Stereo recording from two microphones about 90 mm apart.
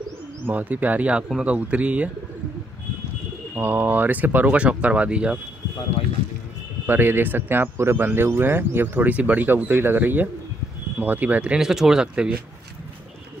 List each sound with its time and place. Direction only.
0.5 s speech: 20° right (ahead or behind)
3.5 s speech: 20° right (ahead or behind)
6.9 s speech: 20° right (ahead or behind)